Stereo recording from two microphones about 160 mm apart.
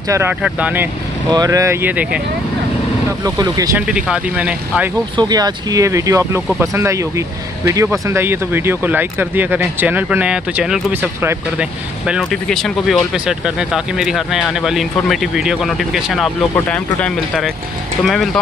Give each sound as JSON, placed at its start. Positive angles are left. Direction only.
{"t": 0.4, "sound": "speech", "side_deg": -10}
{"t": 1.3, "sound": "speech", "side_deg": -20}
{"t": 3.3, "sound": "speech", "side_deg": -20}
{"t": 3.7, "sound": "speech", "side_deg": -5}
{"t": 5.1, "sound": "speech", "side_deg": -25}
{"t": 12.1, "sound": "speech", "side_deg": 0}